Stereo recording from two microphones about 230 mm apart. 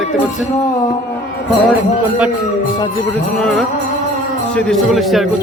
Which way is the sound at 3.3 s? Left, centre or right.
Centre.